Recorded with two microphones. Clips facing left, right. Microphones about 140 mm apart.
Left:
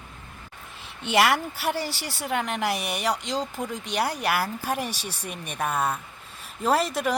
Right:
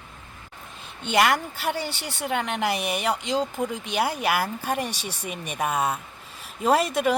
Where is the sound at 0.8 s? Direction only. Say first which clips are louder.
Even; centre (ahead or behind).